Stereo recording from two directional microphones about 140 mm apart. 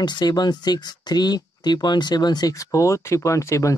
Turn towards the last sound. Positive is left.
turn(degrees=20)  # may be behind; listen again after turning